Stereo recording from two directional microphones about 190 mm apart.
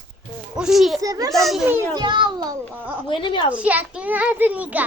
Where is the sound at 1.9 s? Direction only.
25° right (ahead or behind).